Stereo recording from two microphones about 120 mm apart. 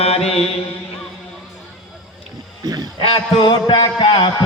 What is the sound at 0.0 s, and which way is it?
Mantra, 55° left (ahead or behind).